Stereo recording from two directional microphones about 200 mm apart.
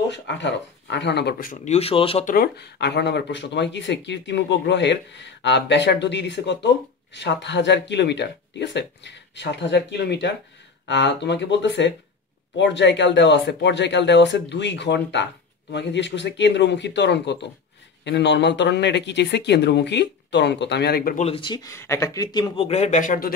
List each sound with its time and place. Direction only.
0.1 s speech: 60° left (ahead or behind); by 2.2 s 30° left (ahead or behind)
2.2 s speech: 50° left (ahead or behind)
21.2 s speech: 25° left (ahead or behind); by 23.3 s 40° left (ahead or behind)